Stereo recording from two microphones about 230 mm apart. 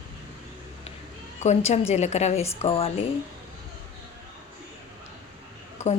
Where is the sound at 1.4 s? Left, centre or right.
Left.